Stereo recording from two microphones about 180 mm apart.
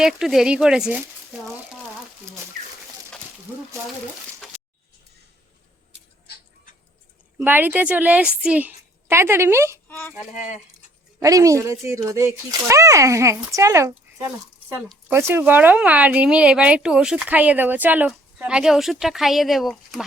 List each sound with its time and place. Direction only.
0.0 s a woman's voice: centre (ahead or behind)
4.4 s a sound: 5° right (ahead or behind)
7.3 s speech: 10° right (ahead or behind)
9.9 s speech: 10° left (ahead or behind)
11.2 s a woman's voice: 20° right (ahead or behind); by 20.1 s centre (ahead or behind)